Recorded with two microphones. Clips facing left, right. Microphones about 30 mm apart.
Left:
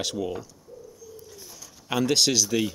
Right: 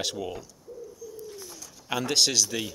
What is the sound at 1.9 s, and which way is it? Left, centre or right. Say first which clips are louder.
Speech: left 3 dB; centre.